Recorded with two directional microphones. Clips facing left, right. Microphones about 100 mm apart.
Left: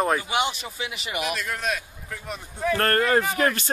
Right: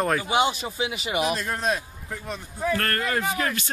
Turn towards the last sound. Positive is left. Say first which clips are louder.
# left 4 dB
turn(degrees=40)  # may be behind; listen again after turning